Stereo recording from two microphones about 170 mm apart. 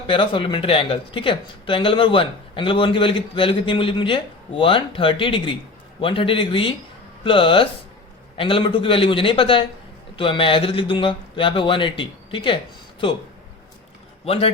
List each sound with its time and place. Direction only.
0.1 s speech: 30° left (ahead or behind)
14.3 s speech: 35° left (ahead or behind)